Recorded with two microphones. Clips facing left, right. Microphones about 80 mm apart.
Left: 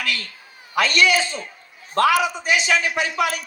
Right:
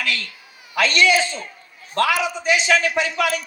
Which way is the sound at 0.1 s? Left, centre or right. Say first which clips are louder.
Right 1 dB; left.